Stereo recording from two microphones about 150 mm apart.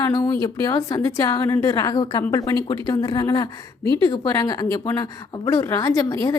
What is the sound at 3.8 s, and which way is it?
Speech, 35° right (ahead or behind).